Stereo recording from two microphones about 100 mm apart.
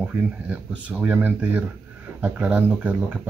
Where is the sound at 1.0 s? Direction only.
15° right (ahead or behind).